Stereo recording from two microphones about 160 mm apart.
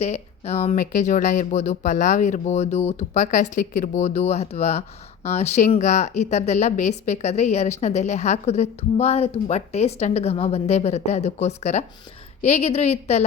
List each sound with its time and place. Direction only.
0.0 s a woman's voice: 45° left (ahead or behind)